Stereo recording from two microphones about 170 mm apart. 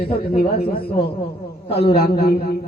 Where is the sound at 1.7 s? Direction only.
35° left (ahead or behind).